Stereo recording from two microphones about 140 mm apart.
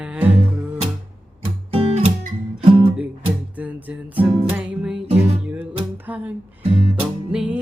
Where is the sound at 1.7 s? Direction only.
50° right (ahead or behind).